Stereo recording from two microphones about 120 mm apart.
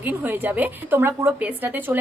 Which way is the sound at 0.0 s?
15° right (ahead or behind).